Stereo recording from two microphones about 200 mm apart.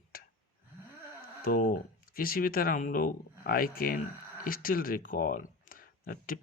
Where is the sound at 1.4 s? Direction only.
45° left (ahead or behind).